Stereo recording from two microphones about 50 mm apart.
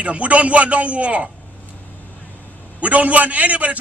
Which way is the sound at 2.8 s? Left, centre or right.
Right.